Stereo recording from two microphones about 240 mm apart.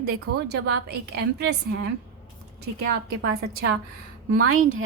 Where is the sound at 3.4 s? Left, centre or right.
Right.